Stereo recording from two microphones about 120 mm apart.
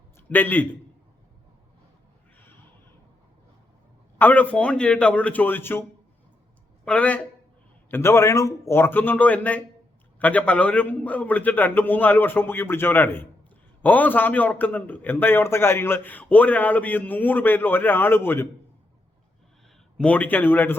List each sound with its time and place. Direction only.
0.2 s a man's voice: 15° left (ahead or behind)
4.2 s a man's voice: 15° left (ahead or behind)
6.8 s a man's voice: 10° left (ahead or behind)
20.0 s a man's voice: 10° left (ahead or behind)